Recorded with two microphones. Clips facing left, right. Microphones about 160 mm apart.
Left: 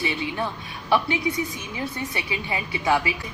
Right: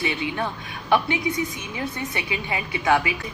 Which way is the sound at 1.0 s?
30° left (ahead or behind).